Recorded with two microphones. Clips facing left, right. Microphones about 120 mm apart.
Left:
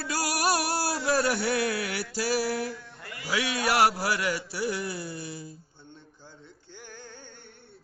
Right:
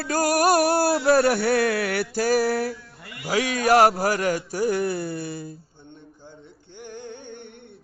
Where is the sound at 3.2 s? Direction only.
45° right (ahead or behind).